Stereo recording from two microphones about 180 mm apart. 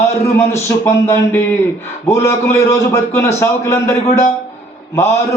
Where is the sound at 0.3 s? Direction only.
15° left (ahead or behind).